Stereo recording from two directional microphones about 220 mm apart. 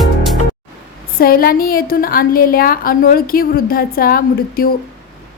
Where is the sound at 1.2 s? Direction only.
40° left (ahead or behind).